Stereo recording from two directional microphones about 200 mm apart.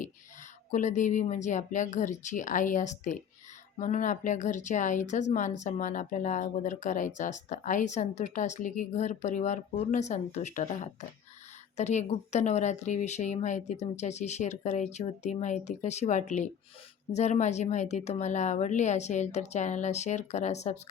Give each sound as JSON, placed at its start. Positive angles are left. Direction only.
{"t": 0.7, "sound": "speech", "side_deg": 35}